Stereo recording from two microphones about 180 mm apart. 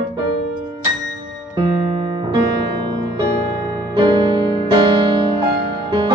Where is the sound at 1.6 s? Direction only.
30° right (ahead or behind).